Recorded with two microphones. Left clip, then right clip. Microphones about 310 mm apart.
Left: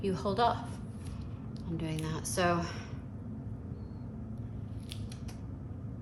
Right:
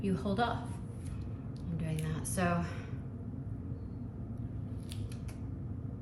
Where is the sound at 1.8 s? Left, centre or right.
Left.